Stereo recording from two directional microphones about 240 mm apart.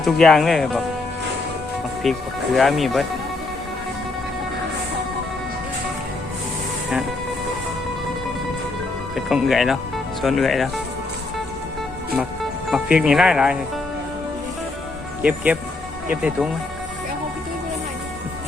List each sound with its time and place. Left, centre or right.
0.0 s speech: centre
2.0 s speech: centre
9.1 s speech: centre
12.7 s speech: centre
15.2 s speech: centre